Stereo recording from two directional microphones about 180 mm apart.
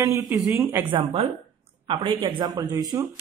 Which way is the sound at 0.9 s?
35° right (ahead or behind).